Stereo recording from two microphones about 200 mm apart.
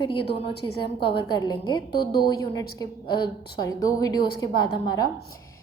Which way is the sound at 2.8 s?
20° left (ahead or behind).